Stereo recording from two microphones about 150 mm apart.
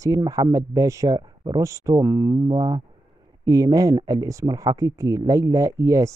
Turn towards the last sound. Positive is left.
turn(degrees=-20)  # may be behind; listen again after turning